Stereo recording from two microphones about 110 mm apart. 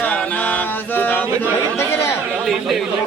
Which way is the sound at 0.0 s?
10° left (ahead or behind).